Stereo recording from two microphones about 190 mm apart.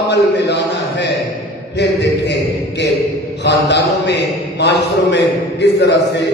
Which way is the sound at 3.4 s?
65° left (ahead or behind).